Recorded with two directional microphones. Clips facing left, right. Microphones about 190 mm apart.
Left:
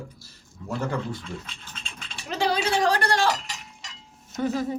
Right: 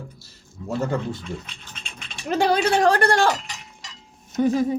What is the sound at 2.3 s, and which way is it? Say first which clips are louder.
Speech: right 5 dB; 50° right (ahead or behind).